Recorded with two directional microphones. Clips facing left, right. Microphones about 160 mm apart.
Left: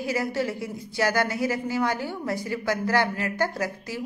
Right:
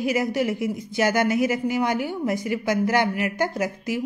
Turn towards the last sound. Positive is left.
turn(degrees=-20)  # may be behind; listen again after turning